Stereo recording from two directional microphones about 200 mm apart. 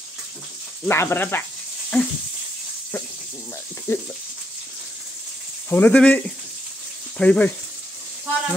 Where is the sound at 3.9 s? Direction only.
15° left (ahead or behind).